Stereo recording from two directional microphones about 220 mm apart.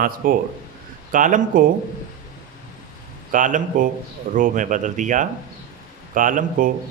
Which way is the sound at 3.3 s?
35° right (ahead or behind).